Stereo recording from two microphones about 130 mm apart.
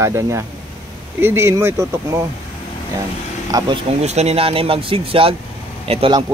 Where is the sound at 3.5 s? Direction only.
30° right (ahead or behind).